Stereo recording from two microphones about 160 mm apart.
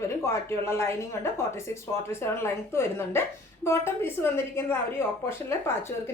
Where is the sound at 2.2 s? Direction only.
15° left (ahead or behind).